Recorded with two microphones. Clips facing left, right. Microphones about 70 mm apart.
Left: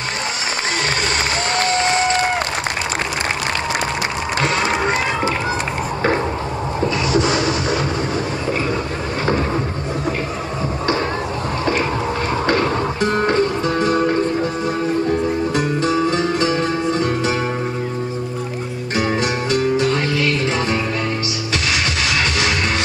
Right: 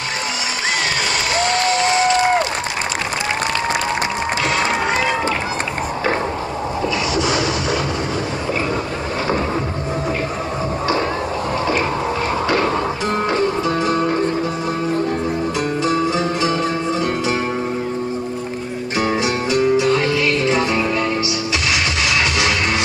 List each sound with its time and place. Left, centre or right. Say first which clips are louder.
7.1 s a sound: left 3 dB; left
12.5 s music: right 1 dB; right
13.0 s music: left 5 dB; left
19.2 s music: right 1 dB; left